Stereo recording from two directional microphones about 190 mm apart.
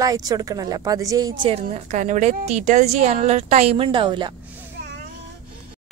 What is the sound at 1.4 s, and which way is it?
A woman's voice, 35° right (ahead or behind).